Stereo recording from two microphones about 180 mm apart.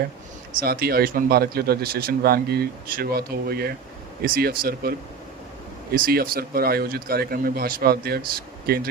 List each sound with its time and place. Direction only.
0.6 s a man's voice: 55° right (ahead or behind)